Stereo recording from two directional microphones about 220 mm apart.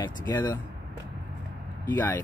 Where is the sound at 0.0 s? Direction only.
20° left (ahead or behind).